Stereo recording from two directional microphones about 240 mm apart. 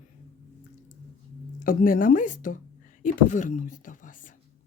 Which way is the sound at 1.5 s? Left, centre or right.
Left.